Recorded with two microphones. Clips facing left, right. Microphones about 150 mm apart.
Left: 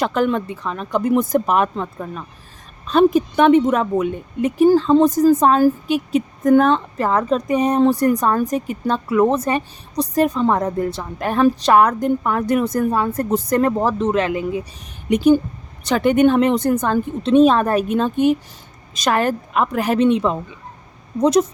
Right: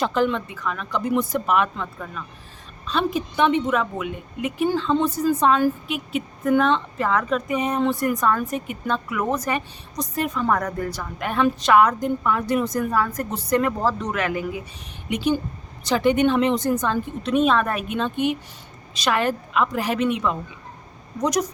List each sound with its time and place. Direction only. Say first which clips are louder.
0.0 s a woman's voice: left 3 dB; 55° left (ahead or behind)
0.5 s a woman's voice: left 2 dB; 30° left (ahead or behind)
0.9 s a woman's voice: left 6 dB; 45° left (ahead or behind)
2.8 s a woman's voice: left 10 dB; 45° left (ahead or behind); by 11.3 s 25° left (ahead or behind)
11.3 s a woman's voice: left 4 dB; 35° left (ahead or behind)
11.9 s a woman's voice: left 4 dB; 55° left (ahead or behind)
12.8 s a woman's voice: left 4 dB; 30° left (ahead or behind)
13.3 s a woman's voice: left 4 dB; 40° left (ahead or behind)
13.7 s a woman's voice: left 6 dB; 20° left (ahead or behind)
15.1 s a woman's voice: left 9 dB; 45° left (ahead or behind)
17.2 s a woman's voice: left 7 dB; 35° left (ahead or behind); by 20.0 s 55° left (ahead or behind)
20.0 s a woman's voice: left 6 dB; 30° left (ahead or behind)